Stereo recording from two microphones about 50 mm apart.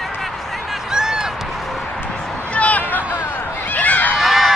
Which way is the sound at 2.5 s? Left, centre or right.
Left.